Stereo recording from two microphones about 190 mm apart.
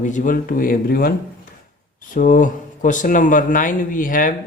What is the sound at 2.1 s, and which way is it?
Speech, 45° left (ahead or behind).